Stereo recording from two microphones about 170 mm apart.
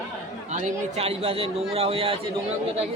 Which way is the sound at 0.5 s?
35° right (ahead or behind).